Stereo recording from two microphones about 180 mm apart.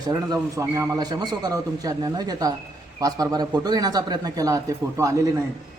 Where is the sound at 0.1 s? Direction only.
20° right (ahead or behind).